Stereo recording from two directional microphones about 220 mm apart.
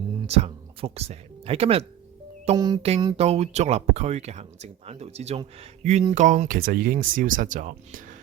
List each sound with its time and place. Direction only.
0.3 s speech: 25° right (ahead or behind)